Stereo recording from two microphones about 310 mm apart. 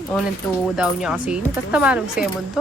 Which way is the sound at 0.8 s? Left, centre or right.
Centre.